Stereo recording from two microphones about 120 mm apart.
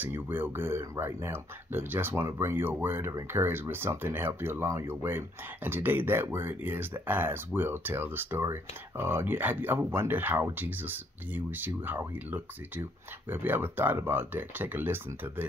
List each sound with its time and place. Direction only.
0.0 s speech: 15° right (ahead or behind)